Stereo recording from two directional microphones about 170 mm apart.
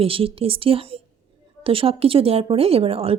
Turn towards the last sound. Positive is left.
turn(degrees=-35)  # may be behind; listen again after turning